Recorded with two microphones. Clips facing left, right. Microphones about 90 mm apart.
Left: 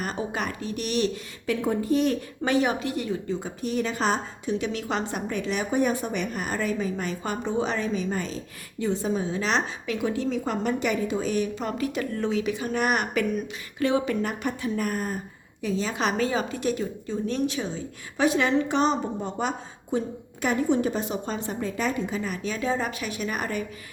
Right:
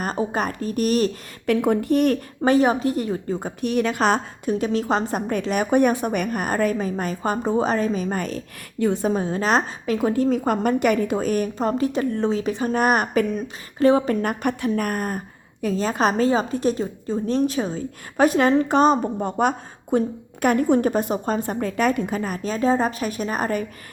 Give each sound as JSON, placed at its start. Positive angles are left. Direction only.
{"t": 0.0, "sound": "a woman's voice", "side_deg": -40}
{"t": 1.6, "sound": "a woman's voice", "side_deg": -65}
{"t": 2.4, "sound": "a woman's voice", "side_deg": -40}
{"t": 3.6, "sound": "a woman's voice", "side_deg": -65}
{"t": 4.5, "sound": "a woman's voice", "side_deg": -40}
{"t": 15.6, "sound": "a woman's voice", "side_deg": -45}